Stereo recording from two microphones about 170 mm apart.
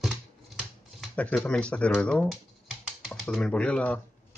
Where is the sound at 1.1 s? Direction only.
10° left (ahead or behind).